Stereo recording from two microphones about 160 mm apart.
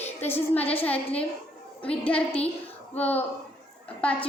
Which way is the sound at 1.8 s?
35° left (ahead or behind).